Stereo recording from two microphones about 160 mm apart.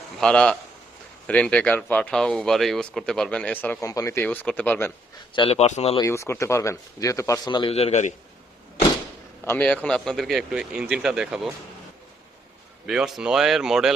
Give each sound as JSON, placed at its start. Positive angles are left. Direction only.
{"t": 0.2, "sound": "speech", "side_deg": 5}
{"t": 5.3, "sound": "speech", "side_deg": 35}
{"t": 6.0, "sound": "speech", "side_deg": 15}
{"t": 9.4, "sound": "speech", "side_deg": 10}
{"t": 12.8, "sound": "speech", "side_deg": -5}